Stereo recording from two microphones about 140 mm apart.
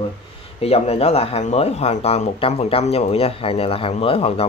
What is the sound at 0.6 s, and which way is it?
Speech, 45° left (ahead or behind).